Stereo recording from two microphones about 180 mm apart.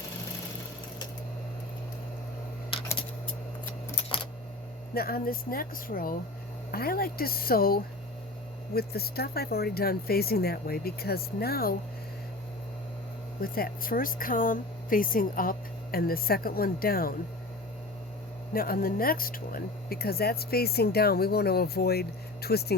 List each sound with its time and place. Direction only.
4.9 s speech: 55° left (ahead or behind)
13.4 s speech: 55° left (ahead or behind)
18.5 s speech: 55° left (ahead or behind)